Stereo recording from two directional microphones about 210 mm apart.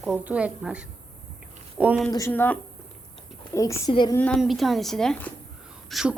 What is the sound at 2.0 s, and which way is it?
Speech, 10° left (ahead or behind).